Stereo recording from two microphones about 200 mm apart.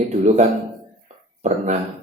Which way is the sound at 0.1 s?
35° right (ahead or behind).